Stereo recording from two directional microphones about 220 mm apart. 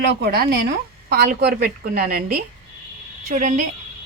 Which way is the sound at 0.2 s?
45° right (ahead or behind).